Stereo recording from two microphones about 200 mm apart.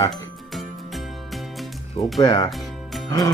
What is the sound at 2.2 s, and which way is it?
Speech, 20° left (ahead or behind).